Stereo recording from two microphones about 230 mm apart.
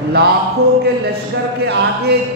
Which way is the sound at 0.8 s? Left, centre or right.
Right.